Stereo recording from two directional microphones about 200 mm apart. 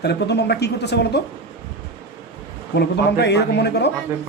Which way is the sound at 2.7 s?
55° left (ahead or behind).